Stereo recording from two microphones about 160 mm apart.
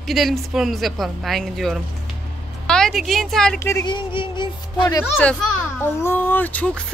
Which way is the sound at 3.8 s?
30° left (ahead or behind).